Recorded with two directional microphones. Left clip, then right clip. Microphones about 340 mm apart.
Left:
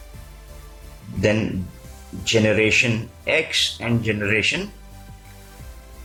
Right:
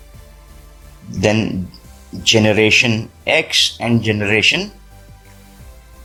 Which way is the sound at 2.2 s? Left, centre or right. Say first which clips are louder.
Right 5 dB; right.